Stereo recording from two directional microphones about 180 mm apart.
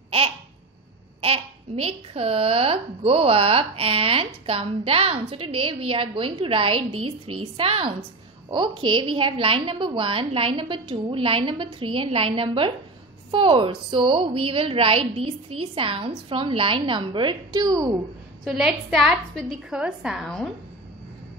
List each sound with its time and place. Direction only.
1.2 s a woman's voice: 35° right (ahead or behind)
18.4 s a woman's voice: centre (ahead or behind)